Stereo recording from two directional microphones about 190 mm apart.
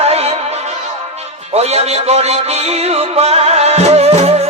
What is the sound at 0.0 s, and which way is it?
Music, 35° right (ahead or behind).